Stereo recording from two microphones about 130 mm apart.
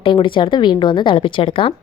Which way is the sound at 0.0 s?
40° left (ahead or behind).